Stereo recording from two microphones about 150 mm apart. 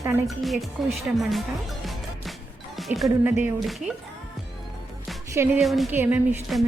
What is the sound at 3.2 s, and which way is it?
Speech, 15° right (ahead or behind).